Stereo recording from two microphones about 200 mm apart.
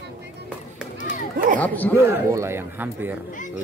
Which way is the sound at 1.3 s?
40° right (ahead or behind).